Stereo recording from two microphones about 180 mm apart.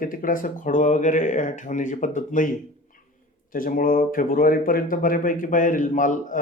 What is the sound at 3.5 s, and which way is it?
Speech, 50° left (ahead or behind).